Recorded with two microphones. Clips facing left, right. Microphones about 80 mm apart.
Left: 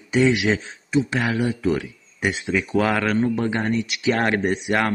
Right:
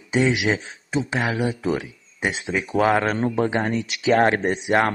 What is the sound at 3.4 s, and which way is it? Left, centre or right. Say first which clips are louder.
Speech: even; centre.